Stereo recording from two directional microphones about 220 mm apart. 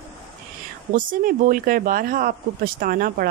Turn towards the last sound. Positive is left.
turn(degrees=-40)  # may be behind; listen again after turning